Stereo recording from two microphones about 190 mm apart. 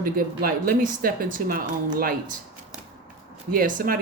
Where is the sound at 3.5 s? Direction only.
50° right (ahead or behind).